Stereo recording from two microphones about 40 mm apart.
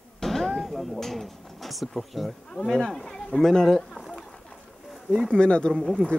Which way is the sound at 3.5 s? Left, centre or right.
Centre.